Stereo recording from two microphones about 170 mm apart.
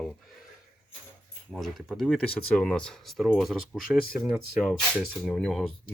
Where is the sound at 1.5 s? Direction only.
Centre (ahead or behind).